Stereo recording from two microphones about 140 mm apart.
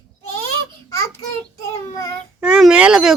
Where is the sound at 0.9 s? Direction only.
20° left (ahead or behind).